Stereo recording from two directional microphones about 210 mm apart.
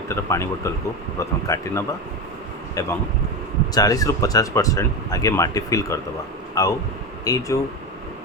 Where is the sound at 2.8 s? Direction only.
15° left (ahead or behind).